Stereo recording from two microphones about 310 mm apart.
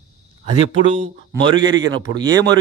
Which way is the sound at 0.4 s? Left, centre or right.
Centre.